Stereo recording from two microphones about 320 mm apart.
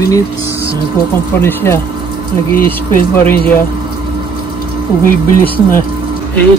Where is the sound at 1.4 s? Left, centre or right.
Centre.